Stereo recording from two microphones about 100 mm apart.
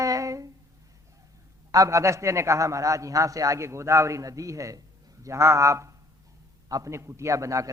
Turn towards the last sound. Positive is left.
turn(degrees=-30)  # may be behind; listen again after turning